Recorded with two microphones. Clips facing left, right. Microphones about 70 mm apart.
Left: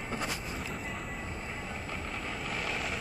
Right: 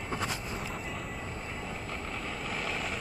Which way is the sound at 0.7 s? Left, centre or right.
Centre.